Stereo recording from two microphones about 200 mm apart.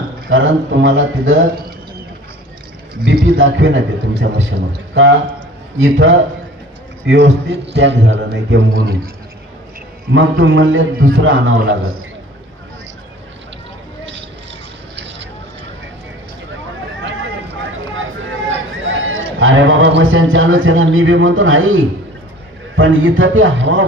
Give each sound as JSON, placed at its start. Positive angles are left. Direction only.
{"t": 0.3, "sound": "speech", "side_deg": -70}
{"t": 3.0, "sound": "a man's voice", "side_deg": -55}
{"t": 7.1, "sound": "a man's voice", "side_deg": -60}
{"t": 10.4, "sound": "speech", "side_deg": -75}
{"t": 15.0, "sound": "vehicle", "side_deg": -60}
{"t": 17.9, "sound": "a man's voice", "side_deg": -75}